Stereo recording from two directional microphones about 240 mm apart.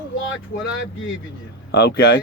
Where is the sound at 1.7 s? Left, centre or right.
Left.